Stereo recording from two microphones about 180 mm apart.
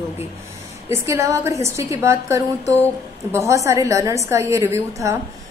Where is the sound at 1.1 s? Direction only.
15° right (ahead or behind).